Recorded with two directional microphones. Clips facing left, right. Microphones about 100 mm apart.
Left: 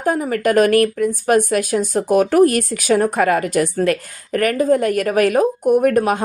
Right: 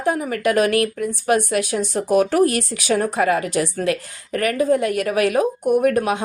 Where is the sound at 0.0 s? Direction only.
40° left (ahead or behind).